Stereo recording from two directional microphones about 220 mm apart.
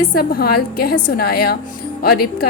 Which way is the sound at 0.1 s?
40° left (ahead or behind).